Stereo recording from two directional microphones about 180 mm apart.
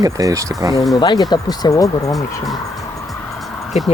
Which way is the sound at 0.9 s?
20° left (ahead or behind).